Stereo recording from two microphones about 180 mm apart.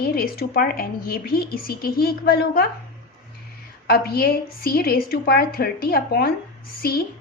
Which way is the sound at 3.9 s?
60° left (ahead or behind).